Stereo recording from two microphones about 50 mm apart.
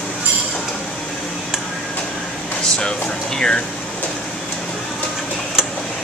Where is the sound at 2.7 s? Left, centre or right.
Centre.